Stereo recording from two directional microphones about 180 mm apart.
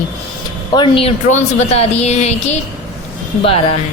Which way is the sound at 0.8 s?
30° left (ahead or behind).